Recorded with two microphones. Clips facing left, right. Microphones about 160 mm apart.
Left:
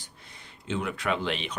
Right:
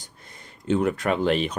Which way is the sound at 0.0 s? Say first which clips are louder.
Right 3 dB; 45° right (ahead or behind).